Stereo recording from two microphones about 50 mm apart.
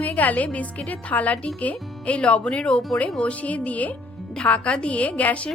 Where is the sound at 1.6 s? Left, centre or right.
Left.